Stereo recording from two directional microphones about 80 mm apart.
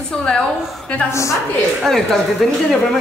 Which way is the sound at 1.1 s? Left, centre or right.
Left.